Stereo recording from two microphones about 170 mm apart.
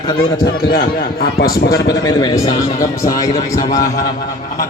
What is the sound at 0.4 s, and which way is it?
Speech, 60° left (ahead or behind).